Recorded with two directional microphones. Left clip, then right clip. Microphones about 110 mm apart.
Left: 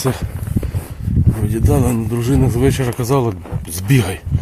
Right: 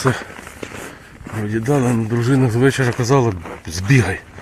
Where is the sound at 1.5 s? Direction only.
35° left (ahead or behind).